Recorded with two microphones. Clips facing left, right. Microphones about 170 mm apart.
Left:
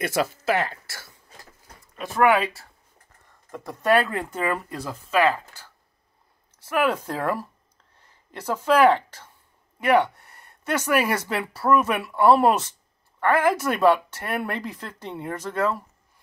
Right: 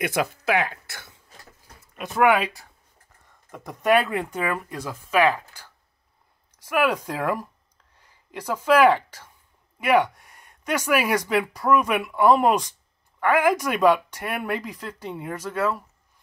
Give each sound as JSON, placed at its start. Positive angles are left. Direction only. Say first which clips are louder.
{"t": 0.0, "sound": "speech", "louder": "even", "side_deg": -15}
{"t": 0.4, "sound": "speech", "louder": "even", "side_deg": 0}
{"t": 0.8, "sound": "speech", "louder": "even", "side_deg": -20}
{"t": 2.0, "sound": "speech", "louder": "even", "side_deg": -5}
{"t": 3.9, "sound": "speech", "louder": "right 1 dB", "side_deg": 0}